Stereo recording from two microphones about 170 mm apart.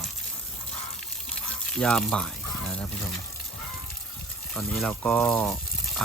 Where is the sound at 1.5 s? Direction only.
5° left (ahead or behind).